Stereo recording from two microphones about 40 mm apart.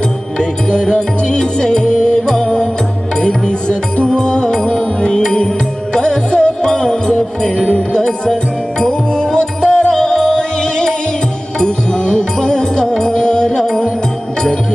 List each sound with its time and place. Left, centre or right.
0.4 s music: centre